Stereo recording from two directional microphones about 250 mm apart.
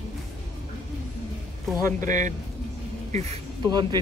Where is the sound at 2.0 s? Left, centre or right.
Right.